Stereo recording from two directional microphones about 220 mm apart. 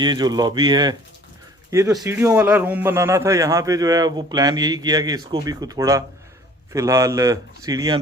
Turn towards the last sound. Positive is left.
turn(degrees=-15)  # may be behind; listen again after turning